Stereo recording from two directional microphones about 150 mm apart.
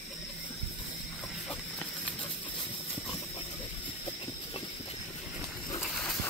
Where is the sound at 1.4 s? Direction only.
5° left (ahead or behind).